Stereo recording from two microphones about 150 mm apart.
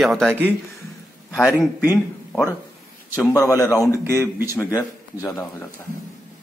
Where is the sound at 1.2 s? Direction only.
Centre (ahead or behind).